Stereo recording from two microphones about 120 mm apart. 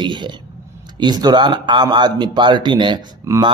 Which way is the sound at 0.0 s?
40° right (ahead or behind).